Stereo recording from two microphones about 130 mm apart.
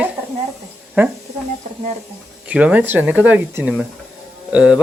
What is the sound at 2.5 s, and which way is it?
A man's voice, 10° right (ahead or behind).